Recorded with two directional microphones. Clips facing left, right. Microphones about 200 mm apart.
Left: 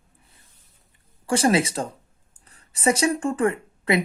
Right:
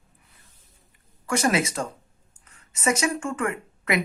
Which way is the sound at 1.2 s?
30° left (ahead or behind).